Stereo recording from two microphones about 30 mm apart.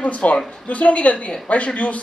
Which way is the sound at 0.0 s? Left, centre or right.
Left.